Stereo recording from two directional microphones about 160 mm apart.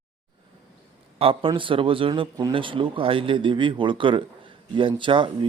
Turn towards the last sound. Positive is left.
turn(degrees=-30)  # may be behind; listen again after turning